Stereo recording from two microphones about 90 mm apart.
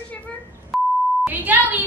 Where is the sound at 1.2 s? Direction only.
20° right (ahead or behind).